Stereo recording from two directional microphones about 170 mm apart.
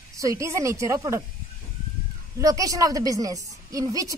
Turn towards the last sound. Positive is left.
turn(degrees=-20)  # may be behind; listen again after turning